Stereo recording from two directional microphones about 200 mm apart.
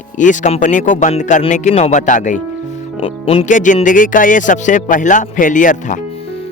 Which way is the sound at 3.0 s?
30° left (ahead or behind).